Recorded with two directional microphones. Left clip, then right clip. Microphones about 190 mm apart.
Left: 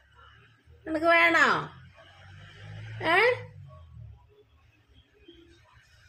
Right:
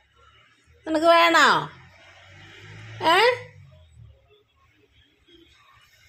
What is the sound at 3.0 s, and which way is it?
Speech, 25° right (ahead or behind).